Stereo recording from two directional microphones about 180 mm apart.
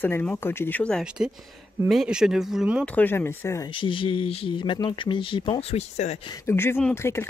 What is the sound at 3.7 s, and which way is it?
Speech, 30° left (ahead or behind).